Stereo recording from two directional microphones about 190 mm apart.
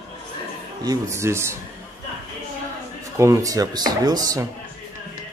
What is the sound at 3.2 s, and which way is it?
Speech, 15° right (ahead or behind).